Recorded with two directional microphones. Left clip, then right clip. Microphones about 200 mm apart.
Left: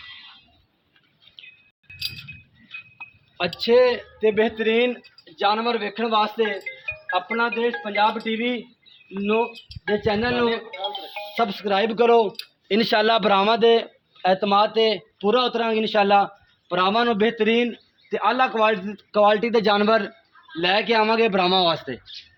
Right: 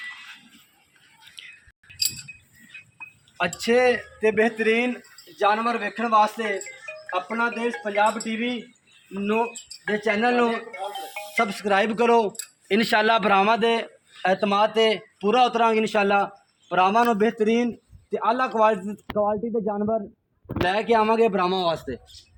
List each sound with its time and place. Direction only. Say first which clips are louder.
3.3 s a man's voice: left 3 dB; 50° left (ahead or behind)
18.1 s a man's voice: left 2 dB; 30° left (ahead or behind)
19.1 s speech: left 6 dB; 55° left (ahead or behind)
20.7 s speech: left 1 dB; 45° left (ahead or behind)